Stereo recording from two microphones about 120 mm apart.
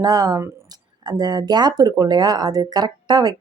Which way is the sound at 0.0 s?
30° right (ahead or behind).